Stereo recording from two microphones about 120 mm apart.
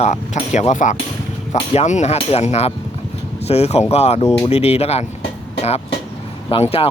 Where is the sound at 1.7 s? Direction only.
70° left (ahead or behind).